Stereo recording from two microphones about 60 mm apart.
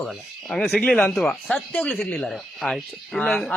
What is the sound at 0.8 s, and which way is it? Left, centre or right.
Speech, centre.